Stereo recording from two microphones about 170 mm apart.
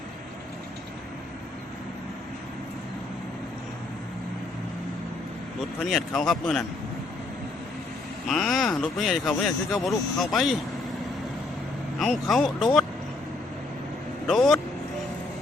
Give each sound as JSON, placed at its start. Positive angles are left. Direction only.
{"t": 5.5, "sound": "a man's voice", "side_deg": 0}
{"t": 8.3, "sound": "a man's voice", "side_deg": 0}
{"t": 11.9, "sound": "a man's voice", "side_deg": 0}
{"t": 14.3, "sound": "a man's voice", "side_deg": 0}